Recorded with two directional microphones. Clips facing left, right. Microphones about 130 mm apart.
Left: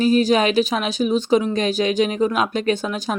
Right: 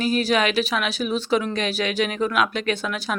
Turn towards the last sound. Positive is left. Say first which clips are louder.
# left 4 dB
turn(degrees=35)  # may be behind; listen again after turning